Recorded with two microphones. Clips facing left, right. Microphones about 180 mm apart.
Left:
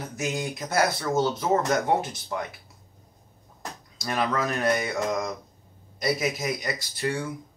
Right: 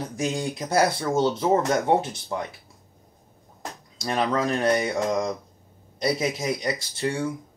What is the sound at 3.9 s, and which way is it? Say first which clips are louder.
Speech: right 2 dB; 30° right (ahead or behind).